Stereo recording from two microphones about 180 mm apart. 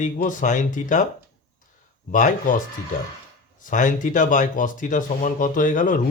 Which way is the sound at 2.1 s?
45° left (ahead or behind).